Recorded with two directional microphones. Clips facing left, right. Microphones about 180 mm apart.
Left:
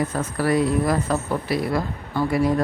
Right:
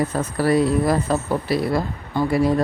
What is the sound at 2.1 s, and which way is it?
Speech, 15° right (ahead or behind).